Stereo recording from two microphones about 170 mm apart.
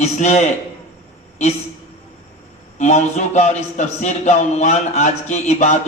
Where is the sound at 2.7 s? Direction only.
40° left (ahead or behind).